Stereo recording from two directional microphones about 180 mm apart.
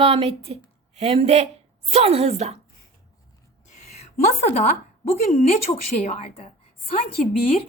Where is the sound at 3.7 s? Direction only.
40° left (ahead or behind).